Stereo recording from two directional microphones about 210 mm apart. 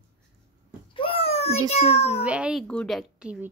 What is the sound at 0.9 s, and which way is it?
Babbling, 25° left (ahead or behind).